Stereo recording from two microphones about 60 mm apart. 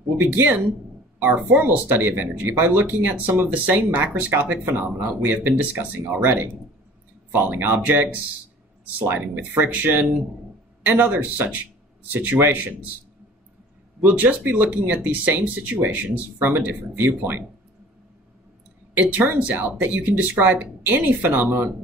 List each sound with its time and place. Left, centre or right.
0.2 s speech: right
9.0 s speech: right
9.4 s speech: right
14.0 s speech: right
18.9 s speech: right